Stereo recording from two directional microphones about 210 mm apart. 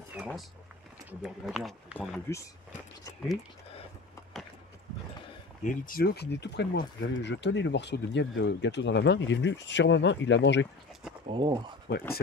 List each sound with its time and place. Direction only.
1.2 s speech: centre (ahead or behind)
5.6 s speech: 40° left (ahead or behind); by 10.7 s 60° left (ahead or behind)
11.2 s speech: 20° right (ahead or behind)